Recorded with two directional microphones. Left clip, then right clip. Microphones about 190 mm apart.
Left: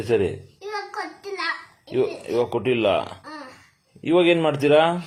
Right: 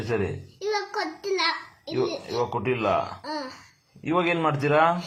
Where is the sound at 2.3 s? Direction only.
40° left (ahead or behind).